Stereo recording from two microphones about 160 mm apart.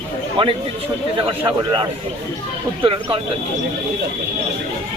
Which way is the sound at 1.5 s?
30° right (ahead or behind).